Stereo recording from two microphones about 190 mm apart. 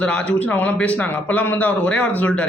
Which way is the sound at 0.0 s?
5° left (ahead or behind).